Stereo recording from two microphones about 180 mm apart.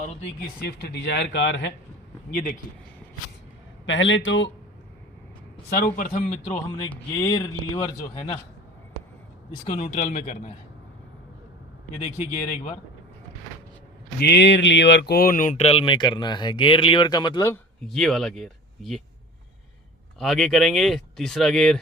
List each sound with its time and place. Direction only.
0.0 s a man's voice: 40° left (ahead or behind)
0.6 s speech: 60° left (ahead or behind)
2.3 s speech: 50° left (ahead or behind)
3.8 s speech: 90° left
5.7 s speech: 50° left (ahead or behind)
6.9 s speech: 15° left (ahead or behind)
8.1 s a man's voice: 30° left (ahead or behind)
9.7 s a man's voice: 40° left (ahead or behind)
14.2 s speech: 70° left (ahead or behind); by 17.6 s 20° left (ahead or behind)
17.8 s speech: centre (ahead or behind)
20.1 s speech: centre (ahead or behind)